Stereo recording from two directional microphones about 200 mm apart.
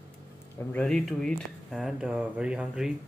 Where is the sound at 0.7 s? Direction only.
5° left (ahead or behind).